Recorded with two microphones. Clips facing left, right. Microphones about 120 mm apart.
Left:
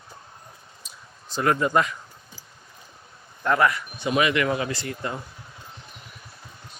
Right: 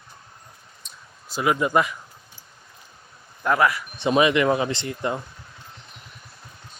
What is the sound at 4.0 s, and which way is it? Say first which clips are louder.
Speech: right 4 dB; 25° right (ahead or behind).